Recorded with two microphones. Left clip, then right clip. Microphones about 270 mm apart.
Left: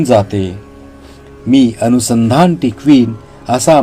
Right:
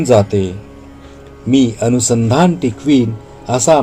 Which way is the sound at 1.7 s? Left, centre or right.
Left.